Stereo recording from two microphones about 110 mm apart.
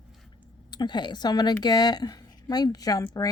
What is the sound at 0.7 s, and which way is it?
A woman's voice, 40° left (ahead or behind).